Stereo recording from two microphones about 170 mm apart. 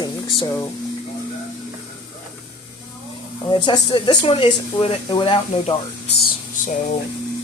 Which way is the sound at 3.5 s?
25° left (ahead or behind).